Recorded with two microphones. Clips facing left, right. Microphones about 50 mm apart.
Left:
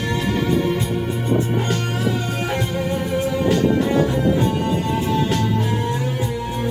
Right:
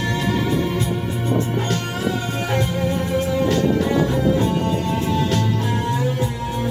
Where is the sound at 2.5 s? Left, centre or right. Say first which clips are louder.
Right 3 dB; centre.